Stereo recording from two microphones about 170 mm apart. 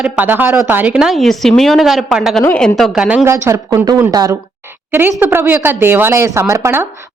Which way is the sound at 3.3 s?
15° right (ahead or behind).